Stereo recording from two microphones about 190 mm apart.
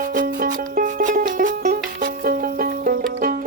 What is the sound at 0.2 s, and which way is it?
Music, 45° right (ahead or behind).